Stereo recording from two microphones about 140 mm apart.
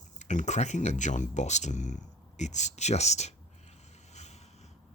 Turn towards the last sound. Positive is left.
turn(degrees=55)  # may be behind; listen again after turning